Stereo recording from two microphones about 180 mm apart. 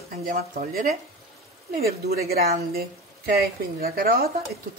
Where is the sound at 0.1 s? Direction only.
55° right (ahead or behind).